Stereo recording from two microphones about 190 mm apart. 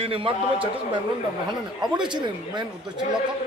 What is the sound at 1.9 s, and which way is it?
Speech, 25° right (ahead or behind).